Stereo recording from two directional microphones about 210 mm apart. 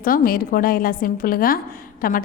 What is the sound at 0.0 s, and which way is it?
A woman's voice, 45° left (ahead or behind).